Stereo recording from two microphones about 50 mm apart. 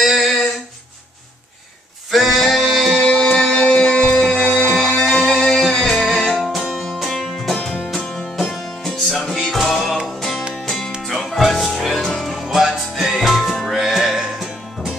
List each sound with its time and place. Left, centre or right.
0.0 s a sound: centre
2.0 s music: centre
3.1 s music: centre
6.5 s music: centre
8.0 s music: centre
8.4 s music: centre
11.1 s music: centre